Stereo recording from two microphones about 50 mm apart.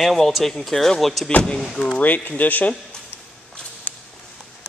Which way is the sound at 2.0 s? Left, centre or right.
Left.